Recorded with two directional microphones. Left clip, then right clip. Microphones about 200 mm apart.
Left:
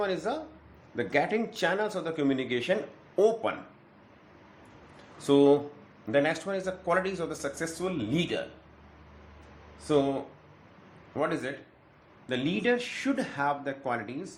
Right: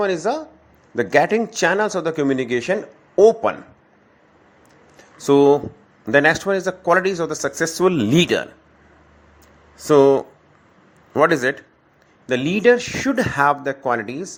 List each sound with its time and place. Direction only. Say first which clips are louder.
0.0 s speech: right 10 dB; 35° right (ahead or behind)
5.1 s speech: right 8 dB; 35° right (ahead or behind)
11.1 s speech: right 15 dB; 55° right (ahead or behind)
12.2 s speech: right 13 dB; 40° right (ahead or behind)